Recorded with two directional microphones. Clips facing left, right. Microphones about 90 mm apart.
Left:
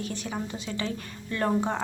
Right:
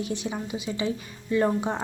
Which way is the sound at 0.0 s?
20° right (ahead or behind).